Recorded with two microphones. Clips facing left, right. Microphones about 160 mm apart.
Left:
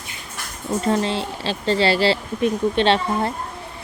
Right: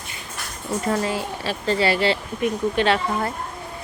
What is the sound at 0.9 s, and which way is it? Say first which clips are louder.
Speech: left 2 dB; 25° left (ahead or behind).